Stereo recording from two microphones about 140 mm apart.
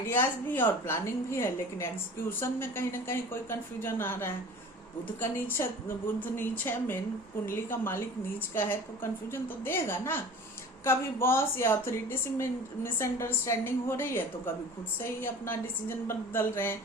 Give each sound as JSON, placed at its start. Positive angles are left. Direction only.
{"t": 0.0, "sound": "a woman's voice", "side_deg": 15}
{"t": 6.1, "sound": "a woman's voice", "side_deg": 15}